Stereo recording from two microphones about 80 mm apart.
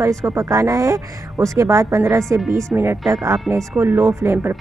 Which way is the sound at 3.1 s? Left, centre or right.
Right.